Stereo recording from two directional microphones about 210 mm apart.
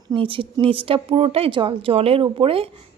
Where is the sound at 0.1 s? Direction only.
25° right (ahead or behind).